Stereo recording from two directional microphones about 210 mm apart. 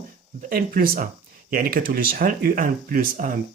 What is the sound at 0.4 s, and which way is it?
Speech, 40° right (ahead or behind).